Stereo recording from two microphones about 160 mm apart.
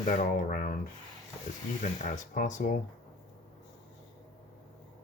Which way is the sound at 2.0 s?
55° left (ahead or behind).